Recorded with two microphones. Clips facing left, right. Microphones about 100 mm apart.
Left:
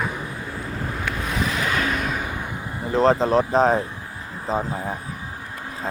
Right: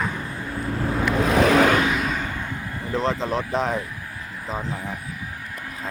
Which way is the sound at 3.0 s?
35° left (ahead or behind).